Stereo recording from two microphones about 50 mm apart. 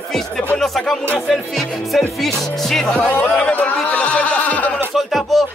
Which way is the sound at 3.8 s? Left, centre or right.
Left.